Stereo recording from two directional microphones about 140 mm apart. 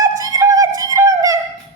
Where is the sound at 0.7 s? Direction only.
25° right (ahead or behind).